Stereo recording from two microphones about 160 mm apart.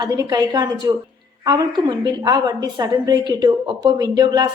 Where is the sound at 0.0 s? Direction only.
25° right (ahead or behind).